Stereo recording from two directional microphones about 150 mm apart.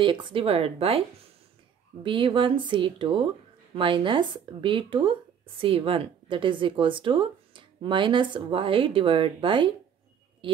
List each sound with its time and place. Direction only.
0.0 s speech: 30° right (ahead or behind)
2.0 s speech: 35° right (ahead or behind)